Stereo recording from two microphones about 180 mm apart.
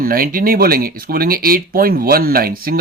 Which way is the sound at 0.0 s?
55° right (ahead or behind).